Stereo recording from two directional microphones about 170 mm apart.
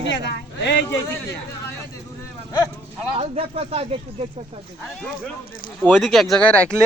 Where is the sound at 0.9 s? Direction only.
15° left (ahead or behind).